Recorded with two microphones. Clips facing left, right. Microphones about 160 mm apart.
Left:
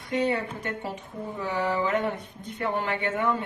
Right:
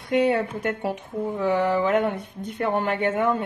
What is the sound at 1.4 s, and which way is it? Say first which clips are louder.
Speech: right 5 dB; 60° right (ahead or behind).